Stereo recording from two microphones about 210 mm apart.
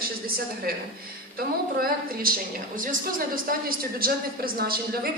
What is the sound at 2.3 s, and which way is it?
Speech, 45° right (ahead or behind).